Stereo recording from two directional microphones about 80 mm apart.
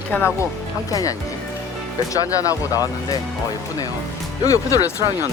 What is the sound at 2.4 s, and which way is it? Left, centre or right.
Speech, left.